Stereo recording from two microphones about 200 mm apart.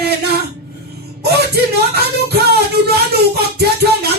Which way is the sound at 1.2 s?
55° right (ahead or behind).